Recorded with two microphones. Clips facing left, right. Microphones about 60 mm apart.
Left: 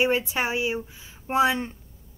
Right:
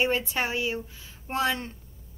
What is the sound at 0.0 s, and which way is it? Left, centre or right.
A woman's voice, centre.